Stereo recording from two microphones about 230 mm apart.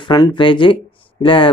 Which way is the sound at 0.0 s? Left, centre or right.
Centre.